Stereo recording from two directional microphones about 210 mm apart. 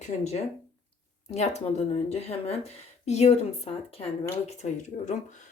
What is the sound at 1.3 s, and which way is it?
A woman's voice, 30° left (ahead or behind).